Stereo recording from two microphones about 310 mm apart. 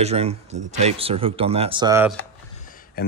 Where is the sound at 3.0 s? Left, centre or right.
Left.